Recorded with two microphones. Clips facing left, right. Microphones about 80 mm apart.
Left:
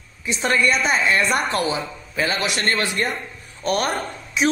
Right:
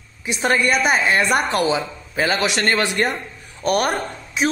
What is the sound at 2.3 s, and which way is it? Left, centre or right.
Speech, right.